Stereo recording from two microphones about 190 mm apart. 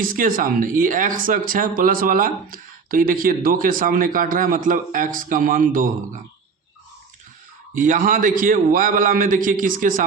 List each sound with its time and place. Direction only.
0.0 s speech: 45° right (ahead or behind)
7.7 s speech: 45° right (ahead or behind)